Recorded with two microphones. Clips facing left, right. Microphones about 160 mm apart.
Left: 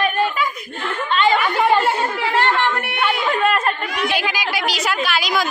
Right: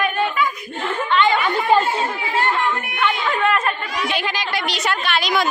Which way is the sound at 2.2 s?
75° left (ahead or behind).